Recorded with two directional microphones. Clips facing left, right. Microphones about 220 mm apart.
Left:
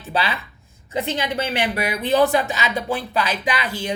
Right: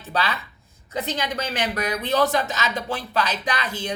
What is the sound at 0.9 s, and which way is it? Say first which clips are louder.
Speech: left 3 dB; 10° left (ahead or behind).